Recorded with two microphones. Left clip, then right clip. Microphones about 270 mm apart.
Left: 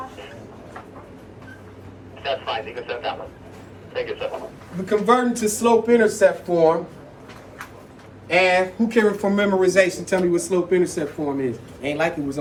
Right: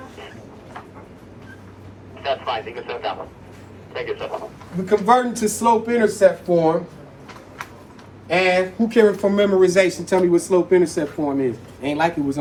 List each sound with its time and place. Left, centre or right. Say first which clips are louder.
2.2 s a man's voice: right 2 dB; right
4.9 s a man's voice: right 2 dB; centre
8.3 s speech: even; centre